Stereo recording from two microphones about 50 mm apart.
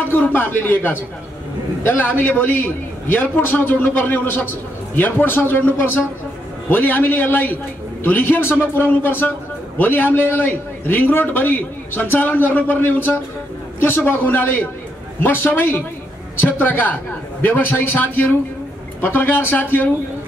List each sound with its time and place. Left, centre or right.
0.1 s a man's voice: left
6.7 s a man's voice: left